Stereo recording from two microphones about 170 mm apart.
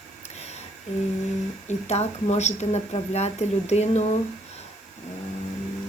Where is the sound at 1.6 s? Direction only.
40° left (ahead or behind).